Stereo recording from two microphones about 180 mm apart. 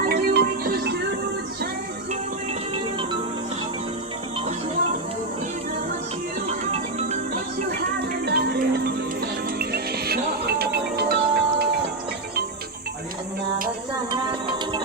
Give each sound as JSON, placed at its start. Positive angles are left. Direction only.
{"t": 0.1, "sound": "music", "side_deg": -60}
{"t": 2.7, "sound": "music", "side_deg": -30}
{"t": 6.5, "sound": "music", "side_deg": -35}
{"t": 7.7, "sound": "music", "side_deg": -60}
{"t": 14.1, "sound": "music", "side_deg": -25}